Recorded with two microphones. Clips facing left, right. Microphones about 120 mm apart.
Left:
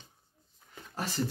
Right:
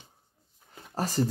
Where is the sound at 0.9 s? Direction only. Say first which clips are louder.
Right 6 dB; 40° right (ahead or behind).